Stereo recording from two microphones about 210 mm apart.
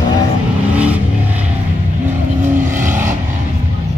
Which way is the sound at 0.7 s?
5° right (ahead or behind).